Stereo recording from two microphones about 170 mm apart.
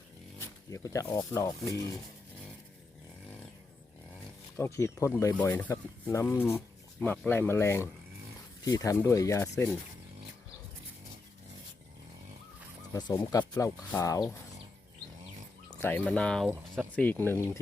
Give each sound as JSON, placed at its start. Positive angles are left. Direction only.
{"t": 0.3, "sound": "speech", "side_deg": 20}
{"t": 4.5, "sound": "speech", "side_deg": 15}
{"t": 12.9, "sound": "speech", "side_deg": 20}
{"t": 15.8, "sound": "speech", "side_deg": 10}